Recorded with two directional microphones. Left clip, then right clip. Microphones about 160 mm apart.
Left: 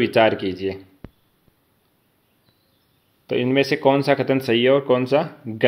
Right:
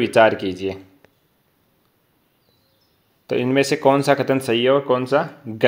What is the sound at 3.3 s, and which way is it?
Speech, 10° right (ahead or behind).